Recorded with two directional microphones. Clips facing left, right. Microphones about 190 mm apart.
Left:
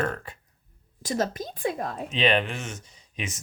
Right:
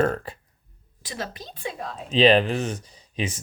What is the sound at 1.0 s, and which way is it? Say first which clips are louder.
Speech: left 7 dB; 45° left (ahead or behind).